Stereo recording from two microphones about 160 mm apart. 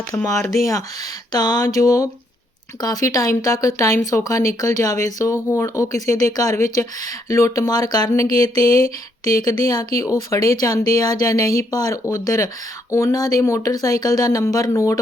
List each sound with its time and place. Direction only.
0.1 s speech: 20° left (ahead or behind)